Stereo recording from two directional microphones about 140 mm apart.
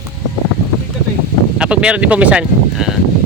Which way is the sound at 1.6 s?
10° right (ahead or behind).